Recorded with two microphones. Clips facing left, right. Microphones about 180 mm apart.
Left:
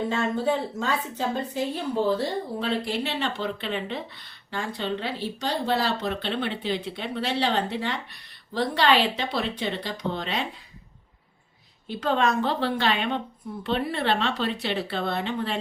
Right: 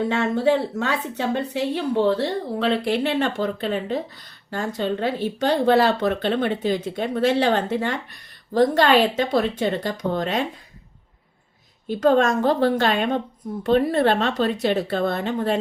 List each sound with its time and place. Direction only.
0.1 s a woman's voice: 75° right (ahead or behind); by 10.4 s 45° right (ahead or behind)
11.9 s speech: 45° right (ahead or behind)